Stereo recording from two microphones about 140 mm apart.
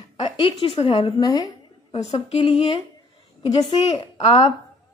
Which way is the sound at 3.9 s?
50° left (ahead or behind).